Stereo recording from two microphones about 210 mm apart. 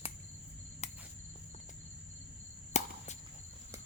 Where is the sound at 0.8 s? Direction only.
30° left (ahead or behind).